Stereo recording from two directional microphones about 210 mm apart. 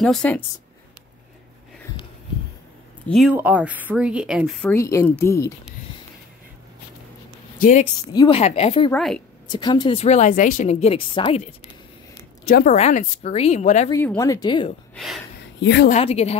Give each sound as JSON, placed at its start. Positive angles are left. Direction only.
{"t": 0.0, "sound": "speech", "side_deg": 5}
{"t": 3.1, "sound": "speech", "side_deg": -5}
{"t": 4.7, "sound": "speech", "side_deg": 15}
{"t": 7.5, "sound": "speech", "side_deg": 40}
{"t": 8.1, "sound": "speech", "side_deg": 20}
{"t": 8.4, "sound": "speech", "side_deg": 30}
{"t": 8.9, "sound": "speech", "side_deg": 5}
{"t": 9.5, "sound": "a woman's voice", "side_deg": 20}
{"t": 12.6, "sound": "a woman's voice", "side_deg": 35}
{"t": 13.8, "sound": "speech", "side_deg": 15}
{"t": 15.0, "sound": "speech", "side_deg": 0}
{"t": 15.6, "sound": "a woman's voice", "side_deg": 55}
{"t": 15.9, "sound": "speech", "side_deg": 30}